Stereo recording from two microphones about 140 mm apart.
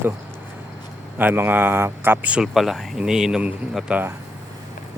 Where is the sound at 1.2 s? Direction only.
15° right (ahead or behind).